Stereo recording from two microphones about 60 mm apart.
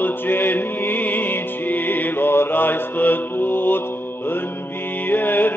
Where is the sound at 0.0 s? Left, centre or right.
Left.